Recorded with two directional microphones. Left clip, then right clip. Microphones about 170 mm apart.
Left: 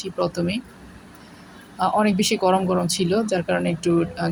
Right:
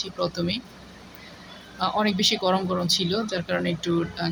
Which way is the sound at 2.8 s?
20° left (ahead or behind).